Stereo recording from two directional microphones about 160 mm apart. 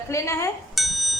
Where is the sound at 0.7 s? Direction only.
Centre (ahead or behind).